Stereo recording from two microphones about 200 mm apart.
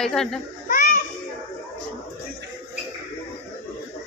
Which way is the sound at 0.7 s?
45° left (ahead or behind).